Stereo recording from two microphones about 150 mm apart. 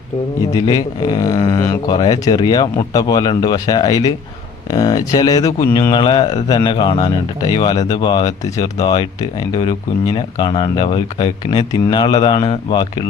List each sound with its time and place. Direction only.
0.5 s speech: 25° left (ahead or behind)